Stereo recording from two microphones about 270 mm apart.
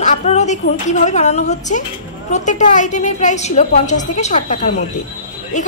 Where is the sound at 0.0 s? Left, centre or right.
Left.